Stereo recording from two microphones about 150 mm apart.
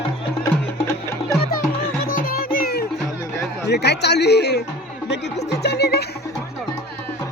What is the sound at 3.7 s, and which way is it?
Speech, 90° left.